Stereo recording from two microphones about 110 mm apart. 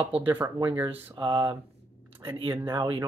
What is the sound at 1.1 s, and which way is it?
Speech, 45° right (ahead or behind).